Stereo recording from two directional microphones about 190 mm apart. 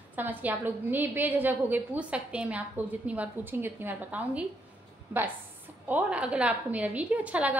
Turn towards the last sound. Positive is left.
turn(degrees=-5)  # may be behind; listen again after turning